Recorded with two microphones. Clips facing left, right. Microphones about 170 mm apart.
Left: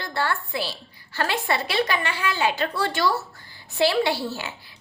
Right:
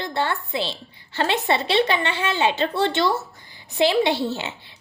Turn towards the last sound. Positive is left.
turn(degrees=-20)  # may be behind; listen again after turning